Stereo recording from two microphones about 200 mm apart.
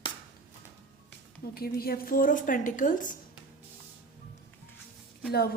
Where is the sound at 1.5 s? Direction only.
50° left (ahead or behind).